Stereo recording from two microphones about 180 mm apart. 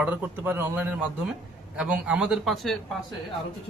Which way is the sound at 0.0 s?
10° right (ahead or behind).